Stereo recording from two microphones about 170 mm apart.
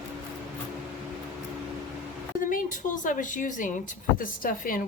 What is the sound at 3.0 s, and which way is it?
A woman's voice, 50° left (ahead or behind).